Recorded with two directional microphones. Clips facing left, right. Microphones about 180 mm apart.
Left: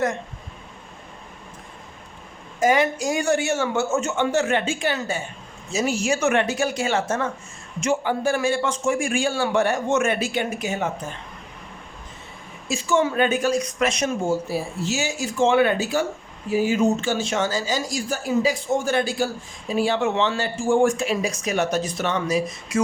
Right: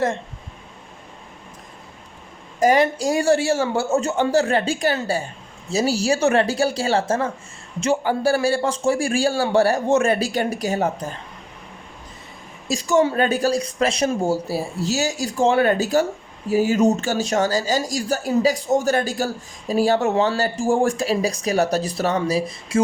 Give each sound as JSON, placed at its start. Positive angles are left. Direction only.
{"t": 2.6, "sound": "speech", "side_deg": -35}
{"t": 12.6, "sound": "speech", "side_deg": -35}